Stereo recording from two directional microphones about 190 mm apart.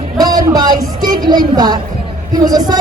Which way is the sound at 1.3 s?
20° right (ahead or behind).